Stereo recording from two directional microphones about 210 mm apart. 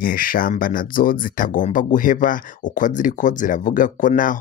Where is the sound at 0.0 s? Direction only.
40° left (ahead or behind).